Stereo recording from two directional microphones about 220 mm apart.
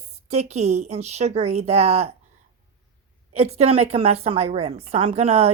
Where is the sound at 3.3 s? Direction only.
30° right (ahead or behind).